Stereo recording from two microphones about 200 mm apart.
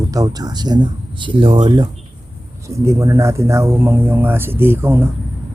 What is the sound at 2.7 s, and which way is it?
Speech, 15° right (ahead or behind).